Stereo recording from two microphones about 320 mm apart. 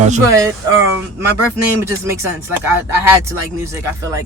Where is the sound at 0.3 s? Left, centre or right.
Centre.